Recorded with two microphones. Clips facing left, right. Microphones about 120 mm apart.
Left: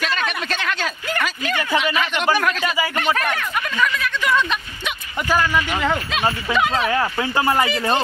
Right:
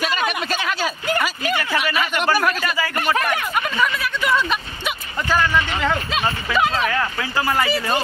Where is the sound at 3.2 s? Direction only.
10° right (ahead or behind).